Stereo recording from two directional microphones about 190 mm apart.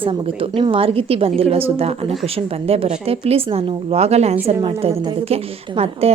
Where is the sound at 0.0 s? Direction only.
30° right (ahead or behind).